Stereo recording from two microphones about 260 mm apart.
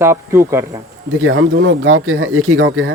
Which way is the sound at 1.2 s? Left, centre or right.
Right.